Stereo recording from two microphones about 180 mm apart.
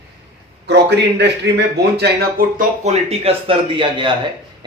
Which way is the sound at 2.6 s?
40° right (ahead or behind).